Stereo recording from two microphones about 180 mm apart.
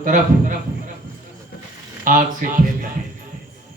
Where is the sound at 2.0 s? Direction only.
50° right (ahead or behind).